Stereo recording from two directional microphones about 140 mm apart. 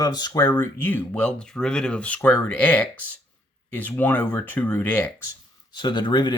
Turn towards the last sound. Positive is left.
turn(degrees=30)  # may be behind; listen again after turning